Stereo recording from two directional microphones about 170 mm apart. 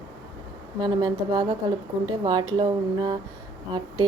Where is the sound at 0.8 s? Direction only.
25° right (ahead or behind).